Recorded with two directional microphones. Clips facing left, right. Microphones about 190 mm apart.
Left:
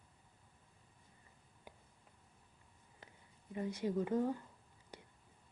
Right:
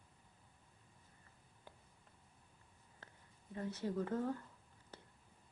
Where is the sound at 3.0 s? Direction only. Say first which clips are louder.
Left 2 dB; 15° left (ahead or behind).